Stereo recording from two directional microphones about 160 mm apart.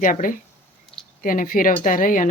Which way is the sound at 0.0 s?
55° left (ahead or behind).